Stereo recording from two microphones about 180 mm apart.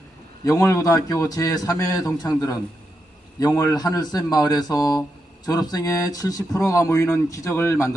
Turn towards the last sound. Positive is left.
turn(degrees=15)  # may be behind; listen again after turning